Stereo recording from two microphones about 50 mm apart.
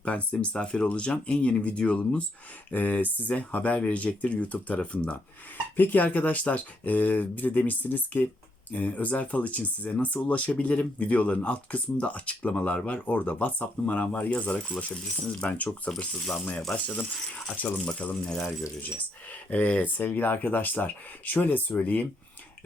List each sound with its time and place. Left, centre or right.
0.0 s speech: left
2.7 s speech: left
5.7 s speech: left; by 16.4 s centre
16.7 s speech: left
19.5 s speech: left